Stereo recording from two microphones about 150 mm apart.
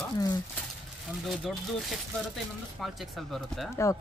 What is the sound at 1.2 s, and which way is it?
Speech, centre (ahead or behind).